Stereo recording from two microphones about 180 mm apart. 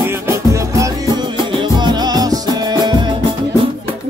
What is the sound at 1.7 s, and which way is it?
Music, 25° right (ahead or behind).